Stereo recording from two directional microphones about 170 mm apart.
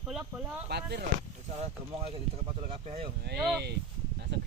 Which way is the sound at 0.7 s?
75° right (ahead or behind).